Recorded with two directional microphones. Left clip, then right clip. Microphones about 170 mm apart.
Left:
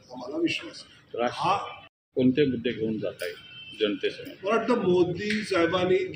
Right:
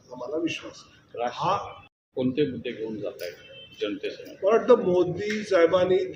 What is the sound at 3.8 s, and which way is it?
Speech, 60° left (ahead or behind).